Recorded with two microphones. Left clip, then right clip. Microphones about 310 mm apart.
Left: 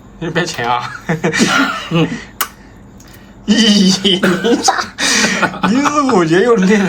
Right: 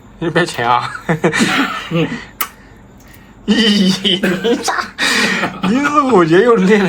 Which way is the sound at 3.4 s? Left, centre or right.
Centre.